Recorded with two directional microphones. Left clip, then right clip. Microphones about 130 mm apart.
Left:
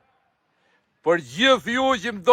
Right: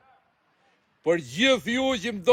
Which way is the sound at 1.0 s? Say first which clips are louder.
Left 3 dB; 45° left (ahead or behind).